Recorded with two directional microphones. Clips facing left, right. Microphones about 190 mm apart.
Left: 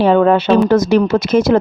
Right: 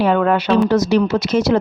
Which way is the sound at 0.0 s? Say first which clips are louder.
Left 4 dB; 30° left (ahead or behind).